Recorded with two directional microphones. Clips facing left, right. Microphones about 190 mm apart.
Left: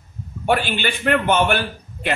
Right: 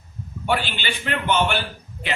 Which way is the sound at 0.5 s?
50° left (ahead or behind).